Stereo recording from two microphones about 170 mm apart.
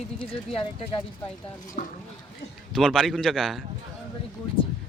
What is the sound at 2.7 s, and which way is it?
Speech, centre (ahead or behind).